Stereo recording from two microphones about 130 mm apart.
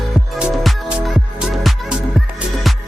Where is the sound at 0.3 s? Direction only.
5° right (ahead or behind).